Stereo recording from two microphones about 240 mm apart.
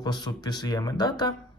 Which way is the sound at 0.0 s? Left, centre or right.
Centre.